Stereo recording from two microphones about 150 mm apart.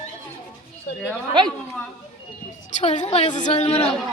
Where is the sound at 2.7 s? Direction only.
55° left (ahead or behind).